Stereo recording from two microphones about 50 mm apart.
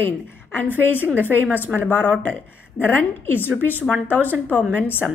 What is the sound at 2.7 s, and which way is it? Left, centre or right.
Speech, left.